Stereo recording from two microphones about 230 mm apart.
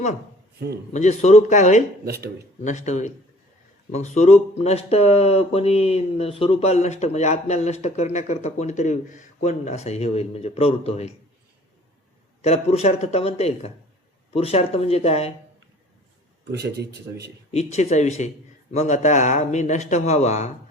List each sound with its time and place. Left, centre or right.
0.9 s speech: left
2.0 s a man's voice: right
2.6 s speech: left
12.4 s speech: left
16.5 s a man's voice: right
17.5 s speech: left